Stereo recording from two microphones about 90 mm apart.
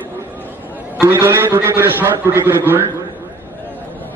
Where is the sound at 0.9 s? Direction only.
30° right (ahead or behind).